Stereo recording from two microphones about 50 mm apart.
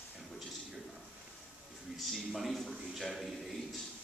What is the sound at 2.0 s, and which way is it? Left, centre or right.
A man's voice, centre.